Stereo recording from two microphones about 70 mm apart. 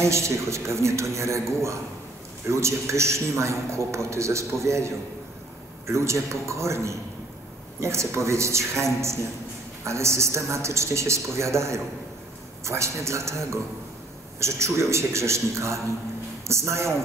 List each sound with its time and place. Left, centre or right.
0.0 s a man's voice: right
9.8 s a man's voice: right